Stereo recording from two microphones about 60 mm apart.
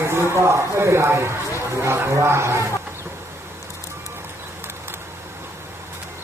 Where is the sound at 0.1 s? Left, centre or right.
Right.